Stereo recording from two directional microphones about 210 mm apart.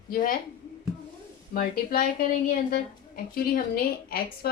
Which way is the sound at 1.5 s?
45° left (ahead or behind).